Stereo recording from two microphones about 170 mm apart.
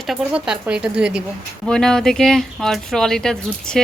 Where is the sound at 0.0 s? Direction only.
5° right (ahead or behind).